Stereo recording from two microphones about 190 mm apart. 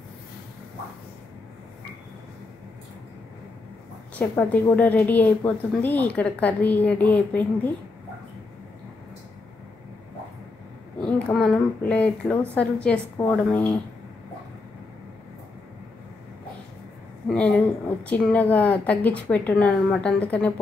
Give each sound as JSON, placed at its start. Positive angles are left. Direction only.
{"t": 4.1, "sound": "a woman's voice", "side_deg": 10}
{"t": 11.0, "sound": "a woman's voice", "side_deg": 5}
{"t": 17.3, "sound": "a woman's voice", "side_deg": 5}